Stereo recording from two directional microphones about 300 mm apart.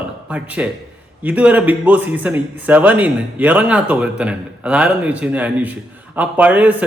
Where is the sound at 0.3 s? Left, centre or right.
Centre.